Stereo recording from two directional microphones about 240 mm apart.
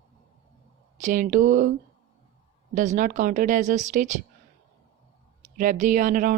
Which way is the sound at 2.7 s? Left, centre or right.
Right.